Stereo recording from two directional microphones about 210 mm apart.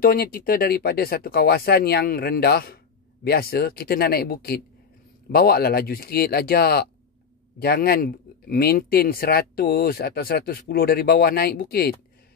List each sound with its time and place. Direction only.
0.0 s speech: 45° left (ahead or behind)